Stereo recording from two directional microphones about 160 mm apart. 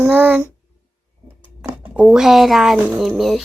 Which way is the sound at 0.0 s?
10° right (ahead or behind).